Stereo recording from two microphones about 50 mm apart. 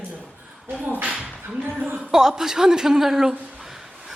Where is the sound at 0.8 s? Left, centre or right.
Right.